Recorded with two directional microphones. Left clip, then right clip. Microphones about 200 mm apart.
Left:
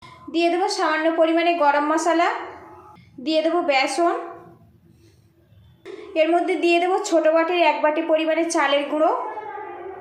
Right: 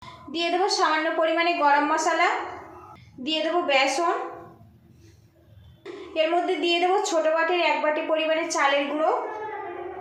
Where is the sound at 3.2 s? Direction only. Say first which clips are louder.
Left 4 dB; 40° left (ahead or behind).